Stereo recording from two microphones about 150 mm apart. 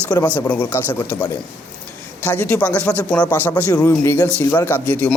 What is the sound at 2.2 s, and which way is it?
Speech, 10° left (ahead or behind).